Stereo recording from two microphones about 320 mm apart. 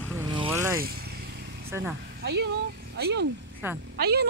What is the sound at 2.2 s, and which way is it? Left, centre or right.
Speech, right.